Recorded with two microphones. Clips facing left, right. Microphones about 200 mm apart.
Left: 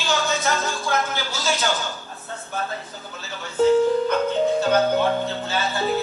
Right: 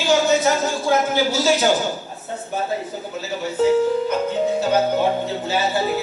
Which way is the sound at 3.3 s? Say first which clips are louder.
Even; 10° right (ahead or behind).